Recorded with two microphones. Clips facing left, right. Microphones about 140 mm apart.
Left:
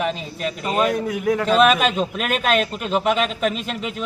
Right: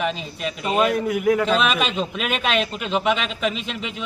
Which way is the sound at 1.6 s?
45° left (ahead or behind).